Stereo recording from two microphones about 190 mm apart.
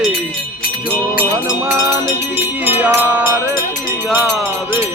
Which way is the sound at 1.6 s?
15° right (ahead or behind).